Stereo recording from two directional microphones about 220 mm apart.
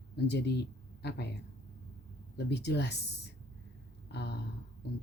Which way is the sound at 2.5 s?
50° left (ahead or behind).